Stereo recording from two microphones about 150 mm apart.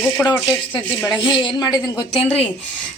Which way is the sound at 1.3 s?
30° left (ahead or behind).